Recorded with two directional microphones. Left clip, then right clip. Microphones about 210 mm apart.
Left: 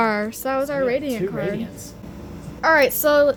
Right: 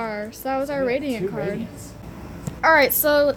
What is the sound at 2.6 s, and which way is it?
Speech, 5° left (ahead or behind).